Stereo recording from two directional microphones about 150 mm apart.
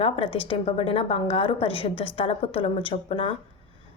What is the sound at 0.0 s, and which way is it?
A woman's voice, 40° left (ahead or behind).